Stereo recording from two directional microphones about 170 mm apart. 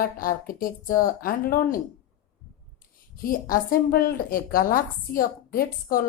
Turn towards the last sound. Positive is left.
turn(degrees=60)  # may be behind; listen again after turning